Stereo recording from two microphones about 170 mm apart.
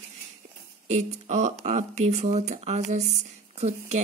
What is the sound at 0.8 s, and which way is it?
Speech, 40° right (ahead or behind).